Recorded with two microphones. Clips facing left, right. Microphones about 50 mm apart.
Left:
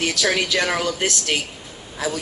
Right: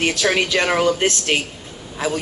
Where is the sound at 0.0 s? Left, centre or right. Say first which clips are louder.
Right 3 dB; right.